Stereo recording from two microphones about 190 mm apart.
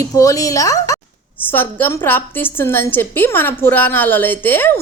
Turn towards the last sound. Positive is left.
turn(degrees=10)  # may be behind; listen again after turning